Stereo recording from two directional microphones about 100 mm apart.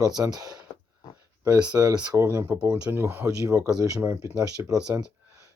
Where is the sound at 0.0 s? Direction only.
40° right (ahead or behind).